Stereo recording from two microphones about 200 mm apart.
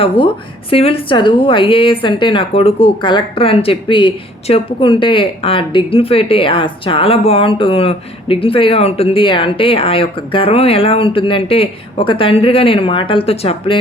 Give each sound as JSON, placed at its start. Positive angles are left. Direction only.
{"t": 0.0, "sound": "a woman's voice", "side_deg": 25}